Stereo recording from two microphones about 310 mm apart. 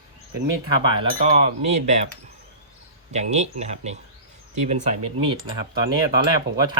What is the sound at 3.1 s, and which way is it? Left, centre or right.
Speech, right.